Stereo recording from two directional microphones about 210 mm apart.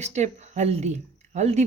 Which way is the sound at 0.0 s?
35° right (ahead or behind).